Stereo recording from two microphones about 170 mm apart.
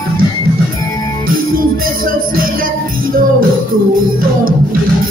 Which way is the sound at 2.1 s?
55° right (ahead or behind).